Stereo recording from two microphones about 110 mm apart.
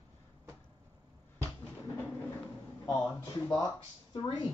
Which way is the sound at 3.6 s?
40° left (ahead or behind).